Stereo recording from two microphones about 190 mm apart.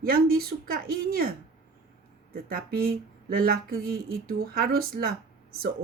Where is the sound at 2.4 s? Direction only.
50° right (ahead or behind).